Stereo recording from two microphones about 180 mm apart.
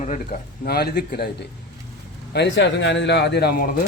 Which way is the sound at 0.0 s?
45° left (ahead or behind).